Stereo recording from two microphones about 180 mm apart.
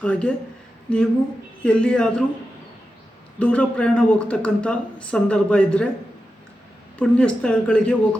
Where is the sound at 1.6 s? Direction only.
5° left (ahead or behind).